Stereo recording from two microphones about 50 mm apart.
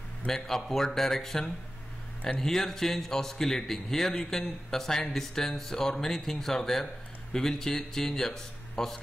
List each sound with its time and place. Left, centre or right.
0.3 s speech: centre